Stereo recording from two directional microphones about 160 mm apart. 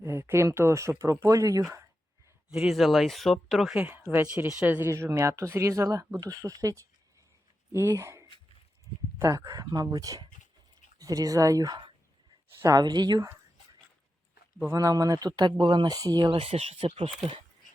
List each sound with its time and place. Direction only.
0.0 s speech: 15° right (ahead or behind)
2.5 s speech: 5° right (ahead or behind)
4.1 s speech: 10° right (ahead or behind)
14.6 s speech: 20° right (ahead or behind); by 17.4 s 35° right (ahead or behind)